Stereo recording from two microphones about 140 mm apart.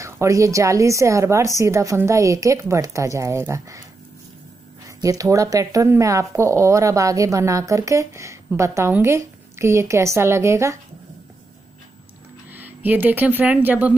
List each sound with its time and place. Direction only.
0.0 s speech: 20° right (ahead or behind)
4.8 s speech: 25° right (ahead or behind)
12.4 s speech: 15° right (ahead or behind)